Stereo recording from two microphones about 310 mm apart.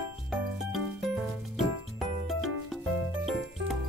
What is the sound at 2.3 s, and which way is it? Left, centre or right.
Music, centre.